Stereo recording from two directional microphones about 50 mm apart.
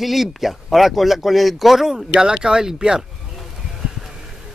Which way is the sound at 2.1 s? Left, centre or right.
Centre.